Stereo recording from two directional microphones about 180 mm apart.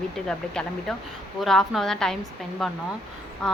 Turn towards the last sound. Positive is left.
turn(degrees=0)  # may be behind; listen again after turning